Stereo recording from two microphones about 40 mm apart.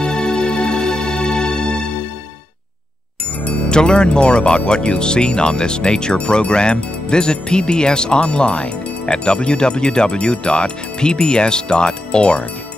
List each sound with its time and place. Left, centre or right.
0.0 s music: centre
3.7 s speech: left